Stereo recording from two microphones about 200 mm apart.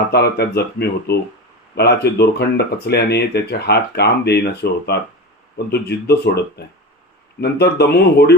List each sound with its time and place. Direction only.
0.1 s speech: 55° left (ahead or behind)
7.4 s speech: 55° left (ahead or behind)